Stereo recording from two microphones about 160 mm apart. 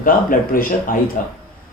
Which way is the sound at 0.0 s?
60° left (ahead or behind).